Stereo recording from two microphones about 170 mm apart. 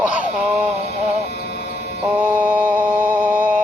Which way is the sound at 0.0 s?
10° right (ahead or behind).